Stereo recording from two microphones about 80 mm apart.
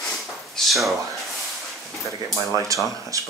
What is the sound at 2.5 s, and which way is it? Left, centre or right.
Speech, right.